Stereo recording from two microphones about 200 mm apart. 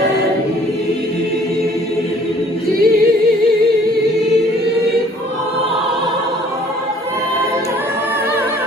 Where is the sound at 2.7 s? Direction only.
50° right (ahead or behind).